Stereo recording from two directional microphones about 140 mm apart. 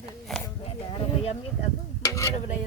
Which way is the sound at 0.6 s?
45° left (ahead or behind).